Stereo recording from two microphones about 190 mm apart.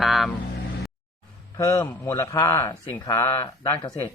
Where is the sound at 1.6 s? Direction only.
15° left (ahead or behind).